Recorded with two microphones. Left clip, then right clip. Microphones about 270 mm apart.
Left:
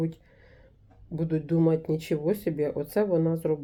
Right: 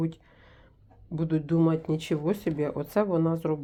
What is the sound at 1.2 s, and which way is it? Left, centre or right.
Speech, centre.